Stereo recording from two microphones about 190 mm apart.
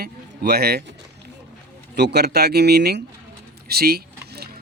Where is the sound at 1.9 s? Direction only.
60° right (ahead or behind).